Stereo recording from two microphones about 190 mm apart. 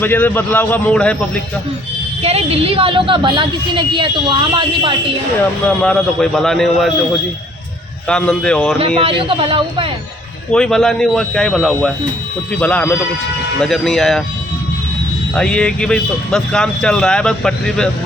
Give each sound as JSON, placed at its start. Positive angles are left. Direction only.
{"t": 0.0, "sound": "a man's voice", "side_deg": 10}
{"t": 2.2, "sound": "a woman's voice", "side_deg": -30}
{"t": 5.6, "sound": "speech", "side_deg": 5}
{"t": 8.0, "sound": "speech", "side_deg": 5}
{"t": 9.0, "sound": "a woman's voice", "side_deg": -30}
{"t": 10.5, "sound": "a man's voice", "side_deg": 5}
{"t": 15.4, "sound": "speech", "side_deg": 5}